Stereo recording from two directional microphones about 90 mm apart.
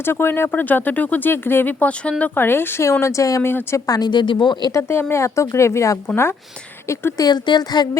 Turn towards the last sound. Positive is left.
turn(degrees=50)  # may be behind; listen again after turning